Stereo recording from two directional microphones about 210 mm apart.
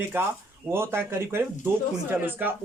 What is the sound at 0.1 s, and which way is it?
Speech, 10° right (ahead or behind).